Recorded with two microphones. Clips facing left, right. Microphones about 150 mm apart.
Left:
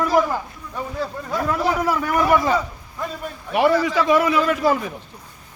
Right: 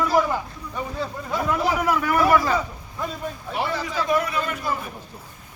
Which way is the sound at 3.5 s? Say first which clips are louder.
Left 10 dB; 85° left.